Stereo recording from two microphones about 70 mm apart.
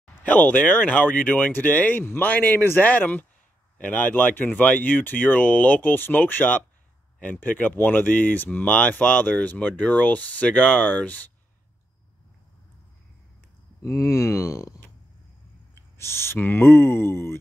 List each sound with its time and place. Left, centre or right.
0.2 s speech: left
13.8 s speech: left
15.7 s speech: left